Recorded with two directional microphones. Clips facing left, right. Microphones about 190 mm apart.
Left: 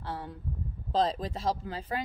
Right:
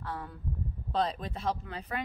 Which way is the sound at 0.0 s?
30° left (ahead or behind).